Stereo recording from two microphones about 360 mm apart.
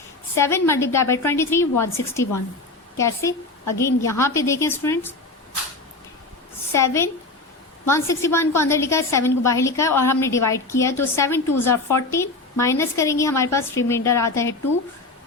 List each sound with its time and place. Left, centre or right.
0.3 s a woman's voice: centre
6.7 s a woman's voice: centre